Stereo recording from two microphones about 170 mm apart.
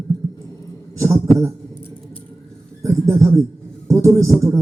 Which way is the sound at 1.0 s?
20° right (ahead or behind).